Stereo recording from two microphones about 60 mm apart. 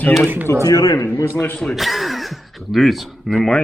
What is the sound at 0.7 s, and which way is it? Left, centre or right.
Speech, left.